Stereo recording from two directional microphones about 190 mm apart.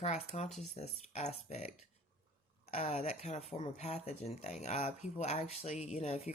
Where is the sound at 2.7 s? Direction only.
35° left (ahead or behind).